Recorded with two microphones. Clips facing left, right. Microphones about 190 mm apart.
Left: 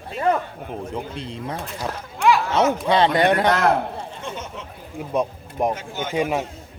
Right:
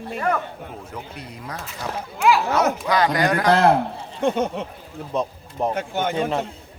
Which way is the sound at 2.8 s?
25° left (ahead or behind).